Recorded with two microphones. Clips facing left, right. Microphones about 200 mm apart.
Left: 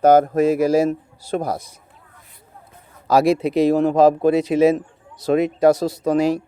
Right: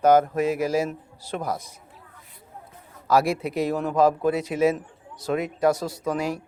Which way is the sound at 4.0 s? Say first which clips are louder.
Left 4 dB; 75° left (ahead or behind).